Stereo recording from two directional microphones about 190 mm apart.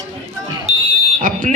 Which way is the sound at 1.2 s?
45° right (ahead or behind).